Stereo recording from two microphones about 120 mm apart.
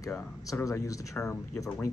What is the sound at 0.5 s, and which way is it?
Speech, 25° left (ahead or behind).